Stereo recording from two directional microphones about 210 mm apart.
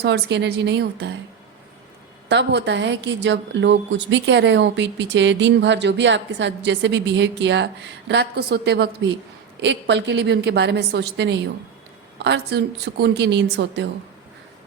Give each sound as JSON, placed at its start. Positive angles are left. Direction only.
{"t": 0.0, "sound": "a woman's voice", "side_deg": -55}
{"t": 2.3, "sound": "a woman's voice", "side_deg": -55}